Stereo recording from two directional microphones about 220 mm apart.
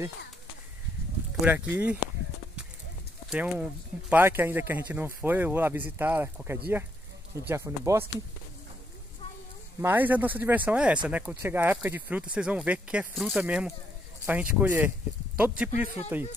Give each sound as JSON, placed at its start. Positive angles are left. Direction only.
{"t": 1.4, "sound": "speech", "side_deg": -10}
{"t": 3.3, "sound": "speech", "side_deg": -5}
{"t": 9.8, "sound": "speech", "side_deg": -10}